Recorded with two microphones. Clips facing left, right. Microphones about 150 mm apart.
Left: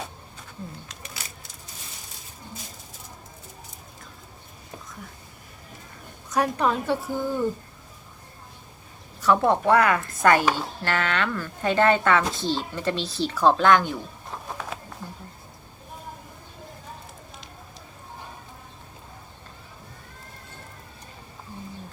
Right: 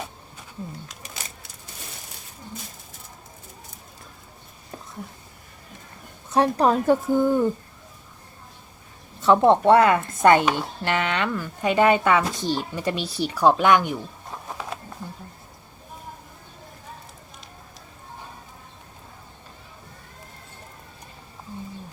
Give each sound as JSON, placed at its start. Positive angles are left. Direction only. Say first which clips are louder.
{"t": 6.3, "sound": "a woman's voice", "louder": "right 4 dB", "side_deg": -30}
{"t": 9.2, "sound": "speech", "louder": "right 4 dB", "side_deg": -25}
{"t": 14.4, "sound": "a sound", "louder": "right 1 dB", "side_deg": -5}